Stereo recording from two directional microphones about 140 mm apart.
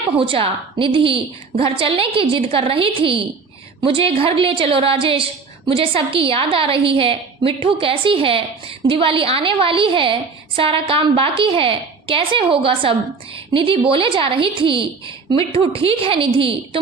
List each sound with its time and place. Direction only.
0.2 s a woman's voice: 40° right (ahead or behind)